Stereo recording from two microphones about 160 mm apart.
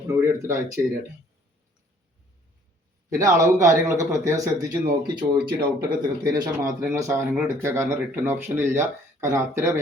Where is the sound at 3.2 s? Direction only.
20° right (ahead or behind).